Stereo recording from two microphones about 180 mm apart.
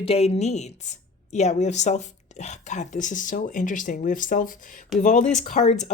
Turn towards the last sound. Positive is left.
turn(degrees=40)  # may be behind; listen again after turning